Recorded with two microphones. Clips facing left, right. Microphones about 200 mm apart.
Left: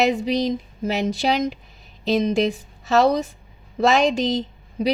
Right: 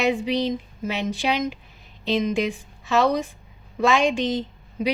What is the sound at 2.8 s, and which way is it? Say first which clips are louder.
A woman's voice: left 3 dB; 40° left (ahead or behind).